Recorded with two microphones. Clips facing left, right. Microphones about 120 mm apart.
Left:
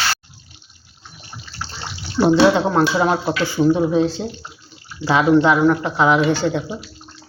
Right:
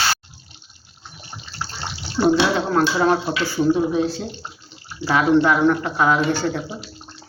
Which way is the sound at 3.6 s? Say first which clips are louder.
Left 2 dB; 25° left (ahead or behind).